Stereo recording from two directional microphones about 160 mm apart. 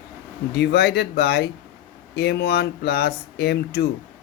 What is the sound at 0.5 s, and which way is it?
Speech, 90° left.